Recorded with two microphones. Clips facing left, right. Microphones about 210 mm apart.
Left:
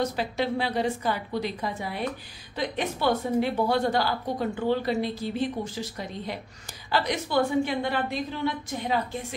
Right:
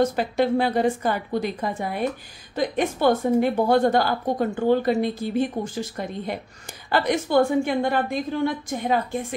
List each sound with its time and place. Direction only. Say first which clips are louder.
0.0 s a woman's voice: right 6 dB; 50° right (ahead or behind)